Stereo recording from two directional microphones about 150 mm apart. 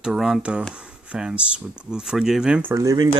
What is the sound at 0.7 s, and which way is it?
Speech, 5° right (ahead or behind).